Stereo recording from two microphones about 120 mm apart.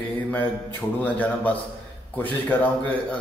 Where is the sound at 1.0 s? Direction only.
15° left (ahead or behind).